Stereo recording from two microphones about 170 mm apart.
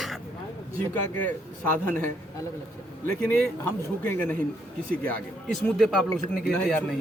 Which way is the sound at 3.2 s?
10° left (ahead or behind).